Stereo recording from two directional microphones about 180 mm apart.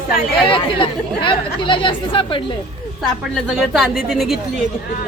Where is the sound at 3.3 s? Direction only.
Centre (ahead or behind).